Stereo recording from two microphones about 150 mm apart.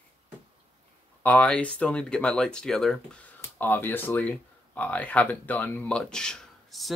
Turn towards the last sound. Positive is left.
turn(degrees=0)  # may be behind; listen again after turning